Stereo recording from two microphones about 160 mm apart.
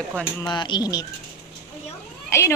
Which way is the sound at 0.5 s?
30° left (ahead or behind).